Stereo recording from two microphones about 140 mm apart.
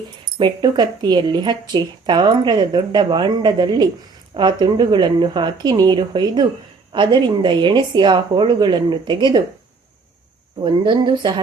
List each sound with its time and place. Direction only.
0.3 s speech: 35° right (ahead or behind)
10.6 s speech: 35° right (ahead or behind)